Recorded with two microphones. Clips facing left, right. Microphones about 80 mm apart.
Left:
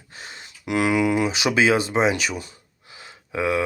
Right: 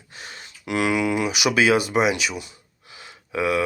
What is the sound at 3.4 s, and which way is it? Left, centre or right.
Speech, left.